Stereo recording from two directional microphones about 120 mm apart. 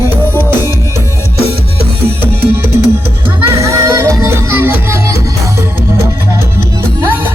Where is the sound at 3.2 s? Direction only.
25° right (ahead or behind).